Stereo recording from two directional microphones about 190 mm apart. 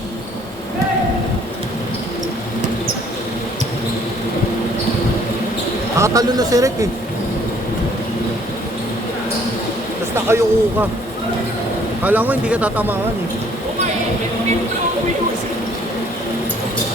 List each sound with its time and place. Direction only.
6.0 s speech: 20° right (ahead or behind)
10.2 s speech: 10° right (ahead or behind)
12.0 s speech: 10° right (ahead or behind)